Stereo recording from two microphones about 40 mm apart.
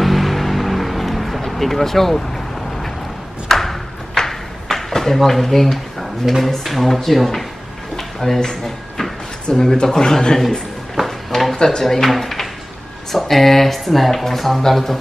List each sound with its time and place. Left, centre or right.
0.0 s vehicle: centre
3.4 s a sound: centre
6.4 s speech: centre
11.1 s drawer open or close: centre
11.5 s speech: centre
11.8 s speech: centre